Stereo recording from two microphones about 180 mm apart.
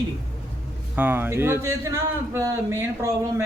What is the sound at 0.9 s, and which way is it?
A man's voice, 10° right (ahead or behind).